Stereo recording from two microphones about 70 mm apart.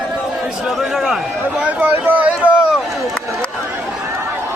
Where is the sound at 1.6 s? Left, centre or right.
Right.